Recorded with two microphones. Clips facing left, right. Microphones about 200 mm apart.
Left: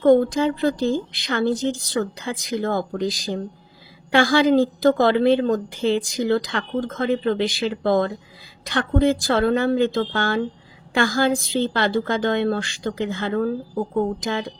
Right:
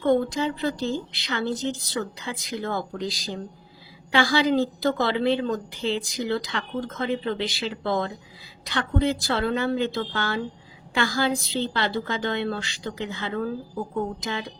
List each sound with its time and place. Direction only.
0.0 s a woman's voice: 45° left (ahead or behind)